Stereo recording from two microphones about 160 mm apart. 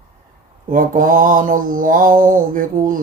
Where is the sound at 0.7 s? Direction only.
55° right (ahead or behind).